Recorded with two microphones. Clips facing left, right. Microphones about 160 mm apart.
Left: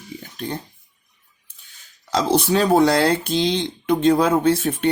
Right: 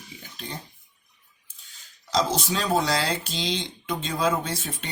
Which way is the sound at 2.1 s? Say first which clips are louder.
Left 6 dB; 60° left (ahead or behind).